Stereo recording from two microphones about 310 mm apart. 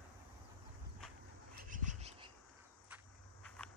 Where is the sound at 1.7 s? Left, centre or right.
Right.